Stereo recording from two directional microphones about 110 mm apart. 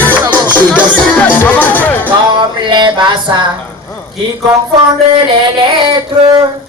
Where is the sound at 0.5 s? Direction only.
15° left (ahead or behind).